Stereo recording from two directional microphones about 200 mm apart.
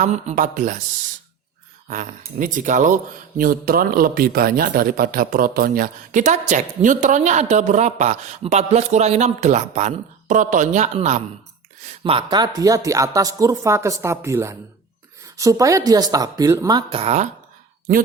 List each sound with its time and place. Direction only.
0.0 s speech: 35° right (ahead or behind)
1.9 s speech: 40° right (ahead or behind)
12.0 s speech: 25° right (ahead or behind)